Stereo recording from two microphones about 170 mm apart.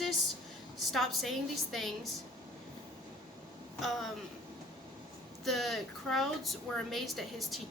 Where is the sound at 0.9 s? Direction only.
Centre (ahead or behind).